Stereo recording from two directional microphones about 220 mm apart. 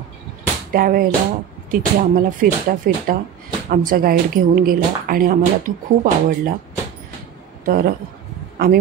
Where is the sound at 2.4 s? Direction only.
40° right (ahead or behind).